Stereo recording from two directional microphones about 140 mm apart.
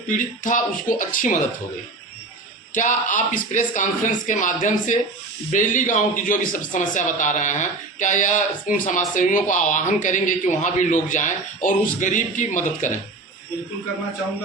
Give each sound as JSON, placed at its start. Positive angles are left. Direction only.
{"t": 0.1, "sound": "speech", "side_deg": 70}
{"t": 2.7, "sound": "speech", "side_deg": 65}